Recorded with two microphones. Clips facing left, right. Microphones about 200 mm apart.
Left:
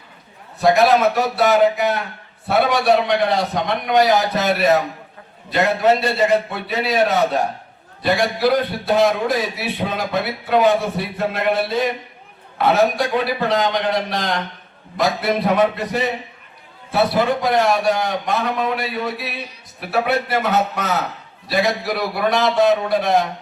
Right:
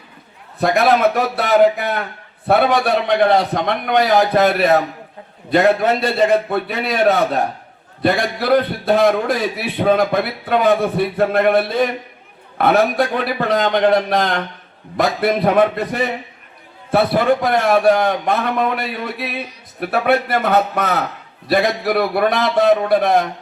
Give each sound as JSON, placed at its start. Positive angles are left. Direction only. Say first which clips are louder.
{"t": 0.6, "sound": "a man's voice", "louder": "even", "side_deg": -55}